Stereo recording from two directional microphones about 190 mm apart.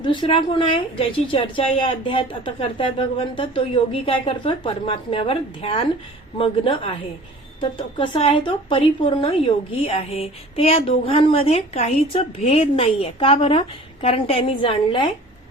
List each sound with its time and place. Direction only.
0.0 s a woman's voice: 25° left (ahead or behind)